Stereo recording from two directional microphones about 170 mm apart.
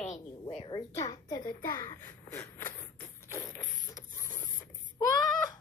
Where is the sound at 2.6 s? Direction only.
15° left (ahead or behind).